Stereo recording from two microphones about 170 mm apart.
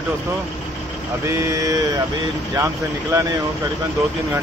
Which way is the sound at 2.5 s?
20° right (ahead or behind).